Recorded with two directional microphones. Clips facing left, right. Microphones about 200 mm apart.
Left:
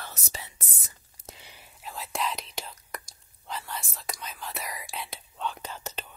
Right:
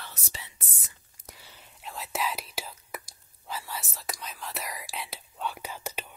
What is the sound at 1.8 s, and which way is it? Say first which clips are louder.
Whispering: even; centre (ahead or behind).